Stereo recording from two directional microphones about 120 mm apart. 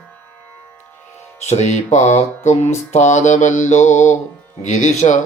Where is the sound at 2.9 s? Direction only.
80° left.